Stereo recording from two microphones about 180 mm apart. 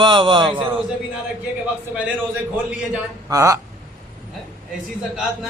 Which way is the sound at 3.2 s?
20° right (ahead or behind).